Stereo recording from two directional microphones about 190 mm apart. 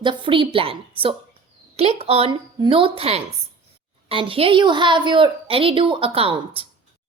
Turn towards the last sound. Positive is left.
turn(degrees=-30)  # may be behind; listen again after turning